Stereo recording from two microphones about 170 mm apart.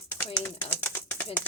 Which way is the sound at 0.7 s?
10° left (ahead or behind).